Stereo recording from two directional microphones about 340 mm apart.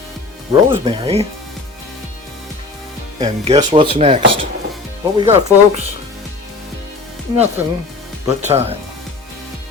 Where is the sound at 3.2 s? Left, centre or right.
Centre.